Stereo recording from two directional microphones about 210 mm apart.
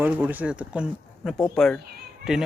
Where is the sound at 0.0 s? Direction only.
10° right (ahead or behind).